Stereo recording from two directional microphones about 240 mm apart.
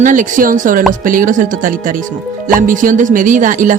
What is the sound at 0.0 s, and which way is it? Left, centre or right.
Speech, right.